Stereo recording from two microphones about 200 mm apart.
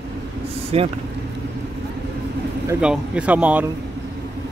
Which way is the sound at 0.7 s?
30° right (ahead or behind).